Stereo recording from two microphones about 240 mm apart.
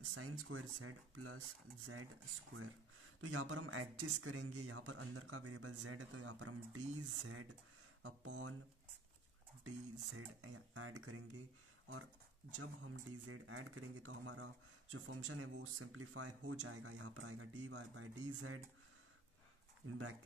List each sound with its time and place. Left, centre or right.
0.0 s speech: right
3.2 s speech: right
8.0 s speech: right
10.1 s speech: right
12.5 s speech: right